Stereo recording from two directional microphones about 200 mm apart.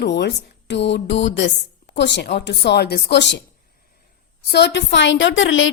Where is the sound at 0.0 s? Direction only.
60° left (ahead or behind).